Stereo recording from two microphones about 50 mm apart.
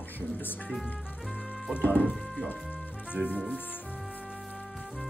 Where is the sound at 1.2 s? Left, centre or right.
Centre.